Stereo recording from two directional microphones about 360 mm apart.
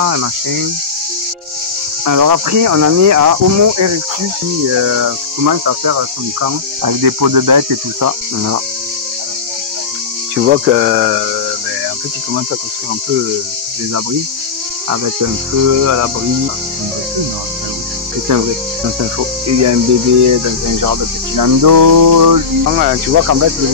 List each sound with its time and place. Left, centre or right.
0.0 s cricket: right
2.0 s cricket: right
4.7 s speech: right
10.3 s cricket: right
14.9 s cricket: right
19.1 s cricket: right
20.2 s speech: right
22.7 s speech: right
23.1 s cricket: right